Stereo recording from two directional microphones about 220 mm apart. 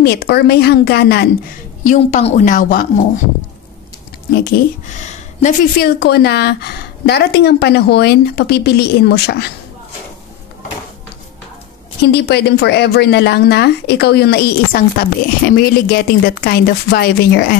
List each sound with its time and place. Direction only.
0.0 s speech: 45° left (ahead or behind)
1.9 s a woman's voice: 30° left (ahead or behind)
4.5 s speech: 35° left (ahead or behind)
12.0 s speech: 50° left (ahead or behind)